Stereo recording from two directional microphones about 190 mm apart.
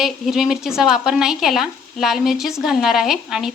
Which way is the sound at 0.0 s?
Centre (ahead or behind).